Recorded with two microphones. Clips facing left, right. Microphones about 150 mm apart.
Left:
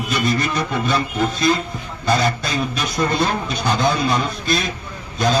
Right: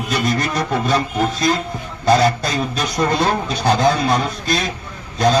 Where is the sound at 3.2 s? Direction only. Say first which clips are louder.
Right 3 dB; 40° right (ahead or behind).